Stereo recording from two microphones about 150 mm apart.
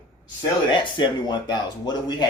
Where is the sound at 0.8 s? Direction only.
30° left (ahead or behind).